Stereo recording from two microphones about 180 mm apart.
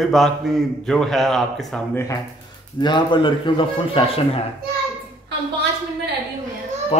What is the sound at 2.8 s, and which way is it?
A man's voice, 25° left (ahead or behind).